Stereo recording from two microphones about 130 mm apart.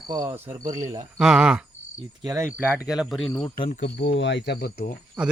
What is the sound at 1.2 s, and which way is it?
Speech, 5° right (ahead or behind).